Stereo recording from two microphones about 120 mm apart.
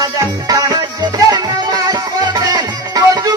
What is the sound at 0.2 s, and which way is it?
Music, 30° right (ahead or behind).